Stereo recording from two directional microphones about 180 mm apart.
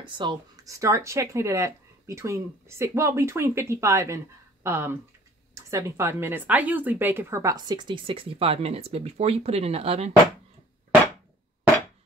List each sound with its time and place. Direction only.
0.0 s speech: 25° right (ahead or behind)